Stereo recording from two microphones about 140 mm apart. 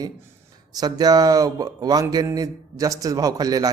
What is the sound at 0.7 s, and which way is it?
A man's voice, 30° right (ahead or behind).